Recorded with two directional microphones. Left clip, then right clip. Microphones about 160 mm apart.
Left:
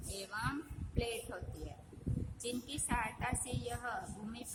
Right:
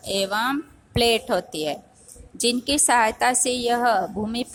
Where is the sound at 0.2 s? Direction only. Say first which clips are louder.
Right 17 dB; 40° right (ahead or behind).